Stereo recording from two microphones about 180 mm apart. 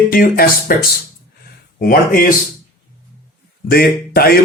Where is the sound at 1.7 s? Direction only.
50° left (ahead or behind).